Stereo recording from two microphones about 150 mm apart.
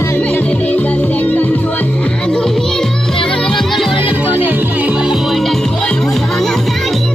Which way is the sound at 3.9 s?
35° left (ahead or behind).